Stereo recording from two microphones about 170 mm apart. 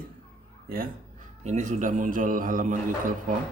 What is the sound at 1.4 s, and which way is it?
Speech, 45° right (ahead or behind).